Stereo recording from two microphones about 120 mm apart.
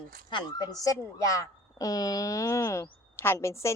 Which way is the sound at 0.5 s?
30° left (ahead or behind).